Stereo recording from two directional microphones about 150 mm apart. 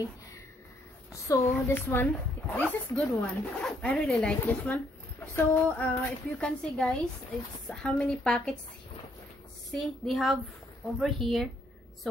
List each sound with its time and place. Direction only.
1.3 s a woman's voice: 20° left (ahead or behind); by 8.5 s 5° left (ahead or behind)
9.7 s a woman's voice: centre (ahead or behind)